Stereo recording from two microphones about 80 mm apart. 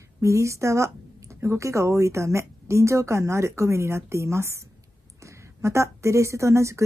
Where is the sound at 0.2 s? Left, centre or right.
Right.